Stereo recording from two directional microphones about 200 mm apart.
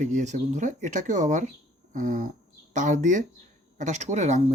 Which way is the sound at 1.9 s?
40° right (ahead or behind).